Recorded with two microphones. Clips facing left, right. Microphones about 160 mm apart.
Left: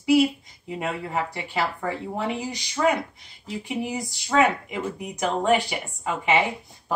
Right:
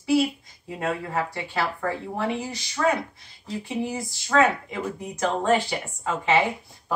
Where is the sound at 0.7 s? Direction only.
15° left (ahead or behind).